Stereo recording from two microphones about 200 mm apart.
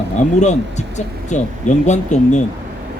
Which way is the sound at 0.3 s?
35° left (ahead or behind).